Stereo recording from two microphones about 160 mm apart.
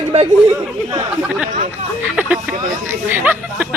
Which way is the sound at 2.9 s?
10° right (ahead or behind).